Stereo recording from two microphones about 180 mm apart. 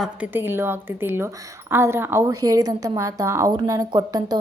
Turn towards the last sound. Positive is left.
turn(degrees=-20)  # may be behind; listen again after turning